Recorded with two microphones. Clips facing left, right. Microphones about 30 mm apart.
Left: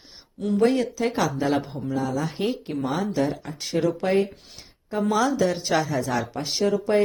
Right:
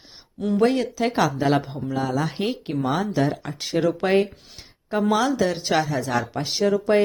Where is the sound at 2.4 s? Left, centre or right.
Centre.